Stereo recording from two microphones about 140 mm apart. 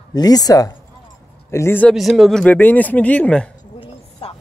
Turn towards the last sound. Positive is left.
turn(degrees=45)  # may be behind; listen again after turning